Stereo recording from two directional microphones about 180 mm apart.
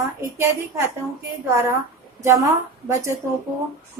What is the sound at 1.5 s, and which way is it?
A woman's voice, 15° right (ahead or behind).